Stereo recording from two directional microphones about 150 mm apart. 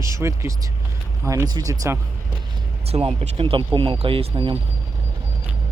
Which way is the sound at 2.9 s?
40° right (ahead or behind).